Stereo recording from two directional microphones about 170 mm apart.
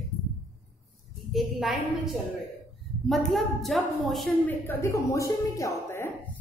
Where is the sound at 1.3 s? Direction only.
Centre (ahead or behind).